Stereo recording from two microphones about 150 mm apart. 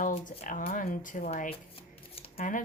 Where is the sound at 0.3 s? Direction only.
60° left (ahead or behind).